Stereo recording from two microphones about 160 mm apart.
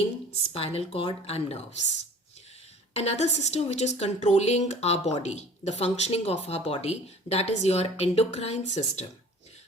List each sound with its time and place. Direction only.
0.3 s a woman's voice: 35° left (ahead or behind)
2.9 s a woman's voice: 40° left (ahead or behind)